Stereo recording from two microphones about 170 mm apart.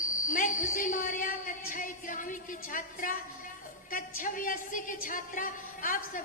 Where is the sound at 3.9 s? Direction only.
55° left (ahead or behind).